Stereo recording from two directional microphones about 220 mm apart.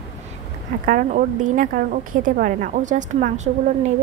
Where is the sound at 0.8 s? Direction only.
40° right (ahead or behind).